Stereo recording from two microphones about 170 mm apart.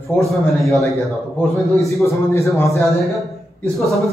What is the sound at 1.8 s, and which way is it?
Speech, 15° left (ahead or behind).